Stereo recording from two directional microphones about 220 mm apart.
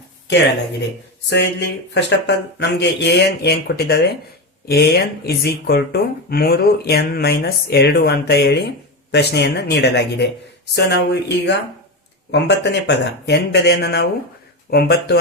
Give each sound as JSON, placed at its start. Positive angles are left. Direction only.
{"t": 1.3, "sound": "speech", "side_deg": 50}